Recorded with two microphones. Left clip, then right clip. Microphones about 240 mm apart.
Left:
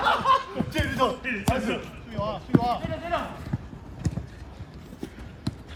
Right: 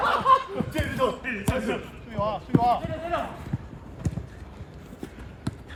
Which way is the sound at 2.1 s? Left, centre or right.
Right.